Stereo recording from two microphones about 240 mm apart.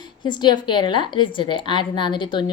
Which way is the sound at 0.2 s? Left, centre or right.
Centre.